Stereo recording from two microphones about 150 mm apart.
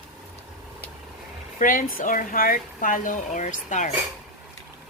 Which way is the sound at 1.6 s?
65° left (ahead or behind).